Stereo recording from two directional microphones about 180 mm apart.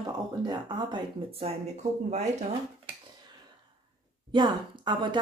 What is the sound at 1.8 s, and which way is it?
Speech, 40° right (ahead or behind).